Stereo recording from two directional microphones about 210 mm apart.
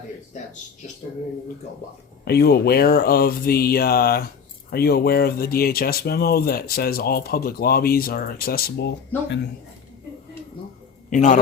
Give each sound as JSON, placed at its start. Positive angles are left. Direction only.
{"t": 2.2, "sound": "speech", "side_deg": 50}
{"t": 9.1, "sound": "speech", "side_deg": 10}
{"t": 11.1, "sound": "a man's voice", "side_deg": 35}